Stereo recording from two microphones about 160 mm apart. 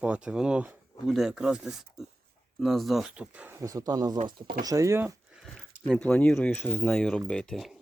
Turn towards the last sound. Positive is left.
turn(degrees=0)  # may be behind; listen again after turning